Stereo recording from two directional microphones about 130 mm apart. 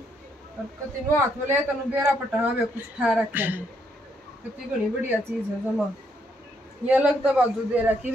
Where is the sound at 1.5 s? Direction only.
15° right (ahead or behind).